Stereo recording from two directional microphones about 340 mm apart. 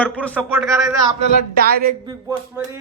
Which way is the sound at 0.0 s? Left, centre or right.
Centre.